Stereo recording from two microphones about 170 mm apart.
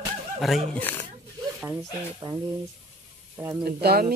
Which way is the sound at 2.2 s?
20° right (ahead or behind).